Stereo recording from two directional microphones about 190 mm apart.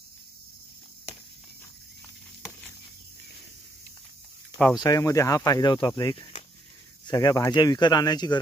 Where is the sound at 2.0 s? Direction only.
15° left (ahead or behind).